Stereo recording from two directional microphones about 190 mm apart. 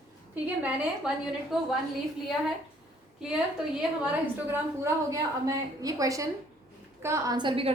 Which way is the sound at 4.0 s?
10° right (ahead or behind).